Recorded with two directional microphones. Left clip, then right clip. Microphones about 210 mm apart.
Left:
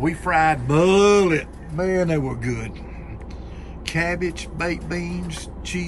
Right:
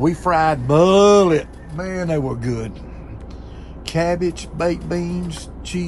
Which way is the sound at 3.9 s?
10° right (ahead or behind).